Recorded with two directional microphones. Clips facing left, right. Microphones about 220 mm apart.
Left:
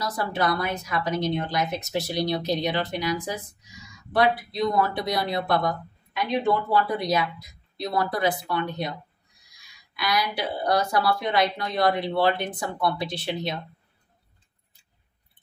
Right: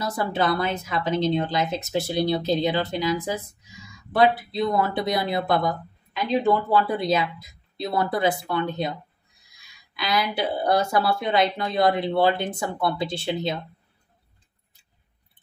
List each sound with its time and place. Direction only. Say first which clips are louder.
0.0 s speech: right 2 dB; 25° right (ahead or behind)
9.9 s speech: right 2 dB; 25° right (ahead or behind)